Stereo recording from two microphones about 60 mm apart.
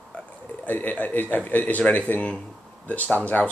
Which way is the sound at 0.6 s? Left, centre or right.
Left.